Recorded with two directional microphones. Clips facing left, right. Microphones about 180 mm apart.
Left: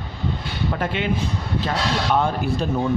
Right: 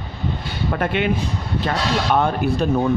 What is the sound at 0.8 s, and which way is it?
Speech, 60° right (ahead or behind).